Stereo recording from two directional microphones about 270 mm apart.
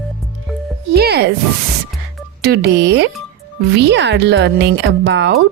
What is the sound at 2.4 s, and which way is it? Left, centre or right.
A woman's voice, right.